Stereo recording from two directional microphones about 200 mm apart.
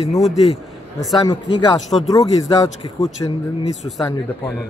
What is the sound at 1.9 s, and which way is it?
Speech, centre (ahead or behind).